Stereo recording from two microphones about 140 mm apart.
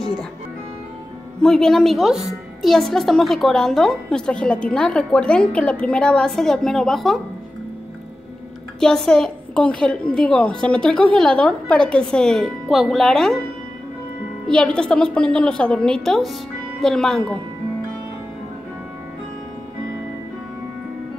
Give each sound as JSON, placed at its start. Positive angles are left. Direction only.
{"t": 1.4, "sound": "speech", "side_deg": 5}
{"t": 8.7, "sound": "speech", "side_deg": 5}
{"t": 14.5, "sound": "speech", "side_deg": 5}